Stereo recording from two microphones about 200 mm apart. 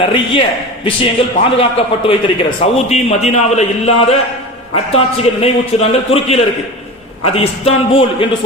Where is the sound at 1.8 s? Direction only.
25° left (ahead or behind).